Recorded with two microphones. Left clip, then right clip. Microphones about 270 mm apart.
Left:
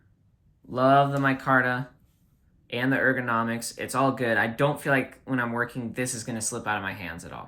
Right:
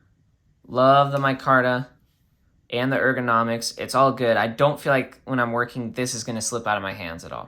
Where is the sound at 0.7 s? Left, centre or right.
Centre.